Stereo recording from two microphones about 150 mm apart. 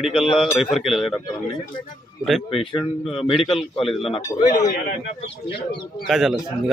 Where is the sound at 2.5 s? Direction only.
40° left (ahead or behind).